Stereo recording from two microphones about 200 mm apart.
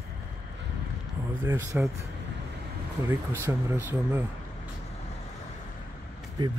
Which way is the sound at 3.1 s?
15° right (ahead or behind).